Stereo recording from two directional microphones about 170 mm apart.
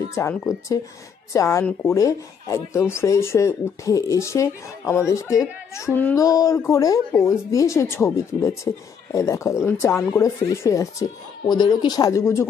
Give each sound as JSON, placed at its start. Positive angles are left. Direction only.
{"t": 0.2, "sound": "speech", "side_deg": 20}